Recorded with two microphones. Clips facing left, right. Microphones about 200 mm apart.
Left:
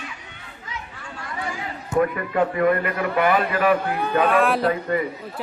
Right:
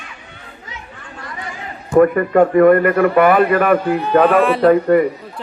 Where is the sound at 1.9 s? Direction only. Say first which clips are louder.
Right 10 dB; 50° right (ahead or behind).